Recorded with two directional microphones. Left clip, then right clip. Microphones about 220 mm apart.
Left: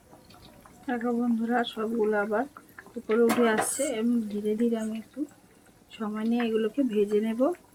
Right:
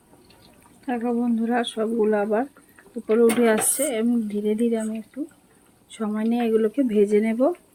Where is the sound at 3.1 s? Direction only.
45° right (ahead or behind).